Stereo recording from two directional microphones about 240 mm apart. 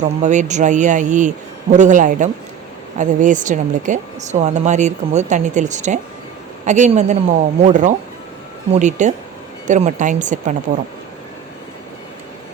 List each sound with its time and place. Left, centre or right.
0.0 s speech: right